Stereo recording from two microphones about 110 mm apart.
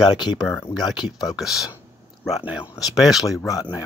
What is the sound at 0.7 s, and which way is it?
Speech, 35° left (ahead or behind).